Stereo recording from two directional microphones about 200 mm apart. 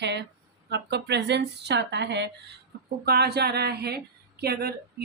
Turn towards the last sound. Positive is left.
turn(degrees=-50)  # may be behind; listen again after turning